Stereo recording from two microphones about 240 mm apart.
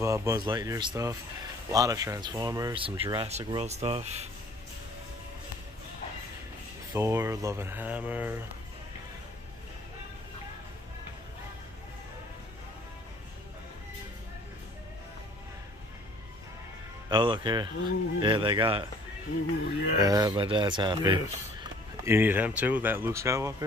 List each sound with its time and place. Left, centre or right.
0.0 s speech: centre; by 4.3 s right
6.9 s speech: centre
17.1 s speech: centre
20.0 s speech: centre